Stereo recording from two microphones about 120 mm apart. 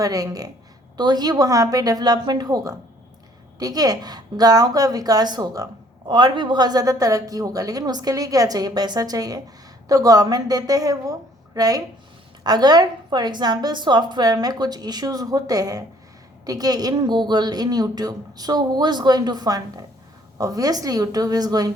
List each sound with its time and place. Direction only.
0.0 s a woman's voice: 30° right (ahead or behind)